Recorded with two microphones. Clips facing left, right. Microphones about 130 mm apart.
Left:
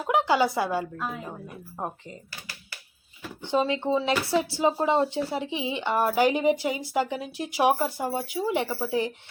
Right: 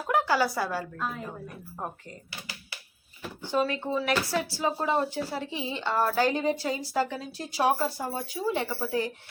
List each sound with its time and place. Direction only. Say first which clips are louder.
0.0 s a woman's voice: left 3 dB; 20° left (ahead or behind)
0.9 s a woman's voice: left 1 dB; 5° left (ahead or behind)
1.8 s speech: left 3 dB; 20° left (ahead or behind)
3.4 s a woman's voice: left 3 dB; 20° left (ahead or behind)